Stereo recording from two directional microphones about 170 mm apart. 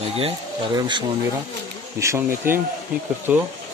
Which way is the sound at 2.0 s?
15° right (ahead or behind).